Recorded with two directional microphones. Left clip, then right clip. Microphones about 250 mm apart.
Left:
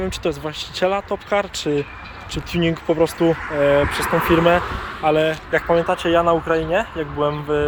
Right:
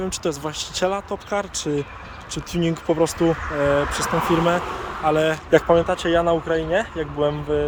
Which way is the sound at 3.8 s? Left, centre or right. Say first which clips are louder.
Left 3 dB; right.